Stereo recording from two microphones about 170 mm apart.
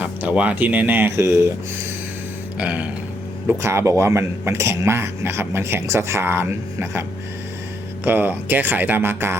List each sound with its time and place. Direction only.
0.0 s speech: 10° right (ahead or behind)
2.6 s speech: 10° right (ahead or behind)
8.0 s speech: 10° right (ahead or behind)